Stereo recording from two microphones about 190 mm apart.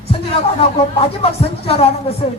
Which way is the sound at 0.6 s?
30° left (ahead or behind).